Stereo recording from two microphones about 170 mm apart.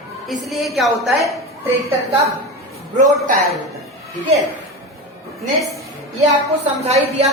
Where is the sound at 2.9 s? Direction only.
50° right (ahead or behind).